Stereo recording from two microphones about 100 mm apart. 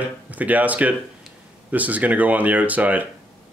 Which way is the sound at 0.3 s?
15° right (ahead or behind).